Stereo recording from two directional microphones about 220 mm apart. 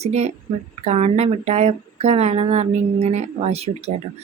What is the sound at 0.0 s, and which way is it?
A woman's voice, 30° right (ahead or behind).